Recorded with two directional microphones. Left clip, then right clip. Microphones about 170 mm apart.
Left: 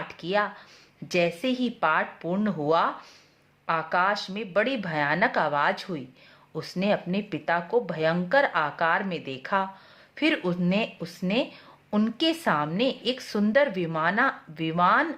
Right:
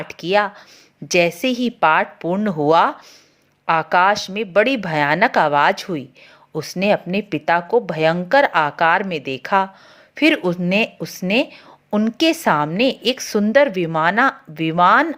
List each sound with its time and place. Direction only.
0.1 s speech: 40° right (ahead or behind)